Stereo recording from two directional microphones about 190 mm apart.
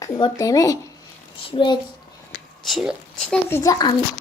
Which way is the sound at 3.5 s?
20° left (ahead or behind).